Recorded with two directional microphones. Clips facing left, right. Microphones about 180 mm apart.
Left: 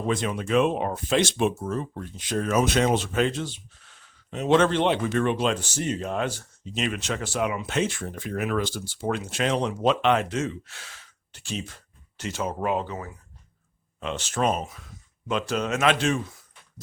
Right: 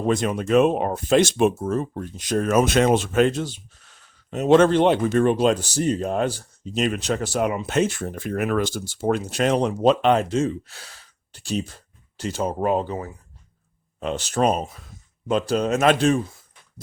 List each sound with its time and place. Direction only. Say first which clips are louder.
0.1 s speech: right 5 dB; 45° right (ahead or behind)